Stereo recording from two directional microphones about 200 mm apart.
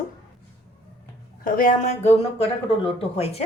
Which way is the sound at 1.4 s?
45° left (ahead or behind).